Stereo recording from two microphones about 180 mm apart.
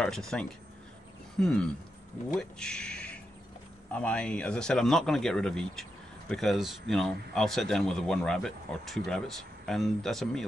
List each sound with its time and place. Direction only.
0.0 s speech: 5° left (ahead or behind)